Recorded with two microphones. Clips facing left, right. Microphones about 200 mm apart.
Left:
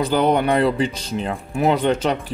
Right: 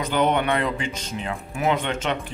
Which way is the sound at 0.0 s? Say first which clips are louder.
Left 4 dB; 35° left (ahead or behind).